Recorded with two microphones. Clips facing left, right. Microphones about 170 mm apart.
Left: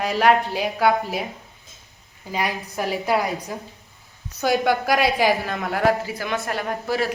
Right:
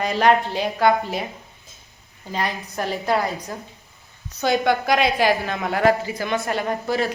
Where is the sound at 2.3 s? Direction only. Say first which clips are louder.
Even; 10° left (ahead or behind).